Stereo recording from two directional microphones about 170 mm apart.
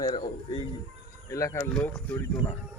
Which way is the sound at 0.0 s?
30° left (ahead or behind).